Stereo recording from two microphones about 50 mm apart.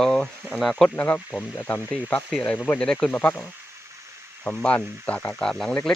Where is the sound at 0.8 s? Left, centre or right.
Left.